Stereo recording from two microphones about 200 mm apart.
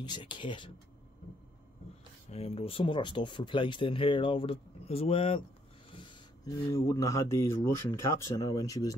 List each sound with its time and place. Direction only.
0.0 s speech: 25° left (ahead or behind)
2.3 s speech: 30° left (ahead or behind)